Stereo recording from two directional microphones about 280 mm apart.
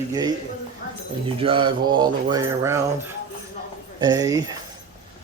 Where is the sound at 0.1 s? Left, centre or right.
Centre.